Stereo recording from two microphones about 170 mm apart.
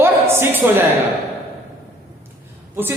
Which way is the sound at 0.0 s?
15° right (ahead or behind).